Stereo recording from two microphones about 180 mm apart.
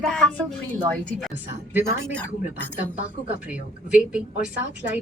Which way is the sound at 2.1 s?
10° left (ahead or behind).